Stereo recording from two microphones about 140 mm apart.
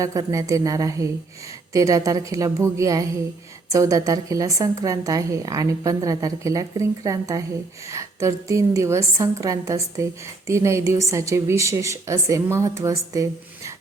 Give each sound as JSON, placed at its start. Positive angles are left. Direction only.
{"t": 0.0, "sound": "a woman's voice", "side_deg": -25}